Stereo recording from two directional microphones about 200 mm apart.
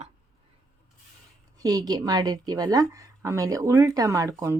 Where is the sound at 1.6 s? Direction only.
20° right (ahead or behind).